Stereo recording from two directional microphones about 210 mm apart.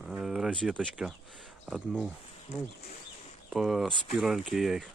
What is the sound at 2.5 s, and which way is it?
Speech, 30° left (ahead or behind).